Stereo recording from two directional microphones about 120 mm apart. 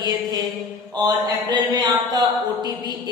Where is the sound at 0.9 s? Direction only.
35° right (ahead or behind).